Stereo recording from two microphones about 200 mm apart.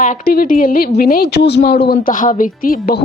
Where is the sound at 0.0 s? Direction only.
45° left (ahead or behind).